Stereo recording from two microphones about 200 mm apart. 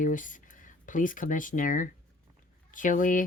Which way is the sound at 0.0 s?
40° left (ahead or behind).